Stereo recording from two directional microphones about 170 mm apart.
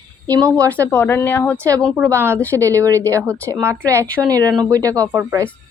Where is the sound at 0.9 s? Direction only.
10° left (ahead or behind).